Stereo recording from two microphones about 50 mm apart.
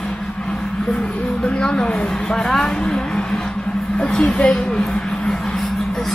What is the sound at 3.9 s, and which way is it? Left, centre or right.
A woman's voice, centre.